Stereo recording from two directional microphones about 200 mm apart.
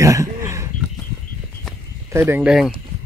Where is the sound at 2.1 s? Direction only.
10° right (ahead or behind).